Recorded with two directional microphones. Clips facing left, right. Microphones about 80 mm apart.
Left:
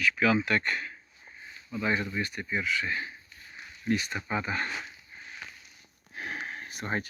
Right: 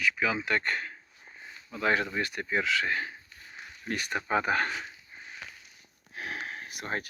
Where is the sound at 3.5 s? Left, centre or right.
Right.